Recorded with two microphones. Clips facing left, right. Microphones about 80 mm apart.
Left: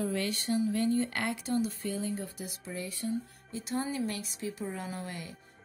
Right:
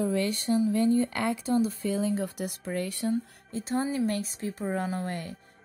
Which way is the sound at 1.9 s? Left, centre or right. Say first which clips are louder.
Right 7 dB; right.